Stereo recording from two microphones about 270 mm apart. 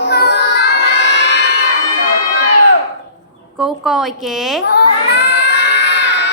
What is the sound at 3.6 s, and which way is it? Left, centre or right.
A woman's voice, centre.